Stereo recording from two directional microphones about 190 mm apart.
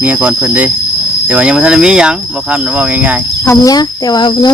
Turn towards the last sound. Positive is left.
turn(degrees=20)  # may be behind; listen again after turning